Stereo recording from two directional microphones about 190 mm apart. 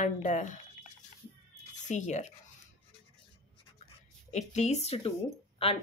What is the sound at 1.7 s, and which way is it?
Speech, 40° left (ahead or behind).